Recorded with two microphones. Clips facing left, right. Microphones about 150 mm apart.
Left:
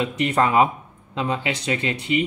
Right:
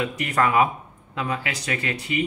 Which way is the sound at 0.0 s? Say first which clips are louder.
Left 2 dB; 25° left (ahead or behind).